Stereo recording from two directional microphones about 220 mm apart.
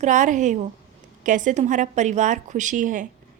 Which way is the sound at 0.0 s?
35° right (ahead or behind).